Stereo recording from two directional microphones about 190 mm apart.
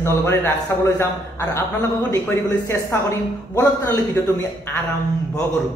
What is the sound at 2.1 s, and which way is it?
A man's voice, 10° left (ahead or behind).